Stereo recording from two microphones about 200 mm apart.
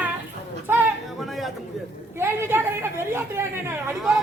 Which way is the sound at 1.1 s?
Centre (ahead or behind).